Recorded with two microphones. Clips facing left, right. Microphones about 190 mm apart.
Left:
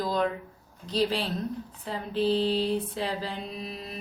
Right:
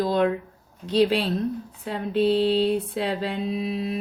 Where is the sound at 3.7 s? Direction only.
65° right (ahead or behind).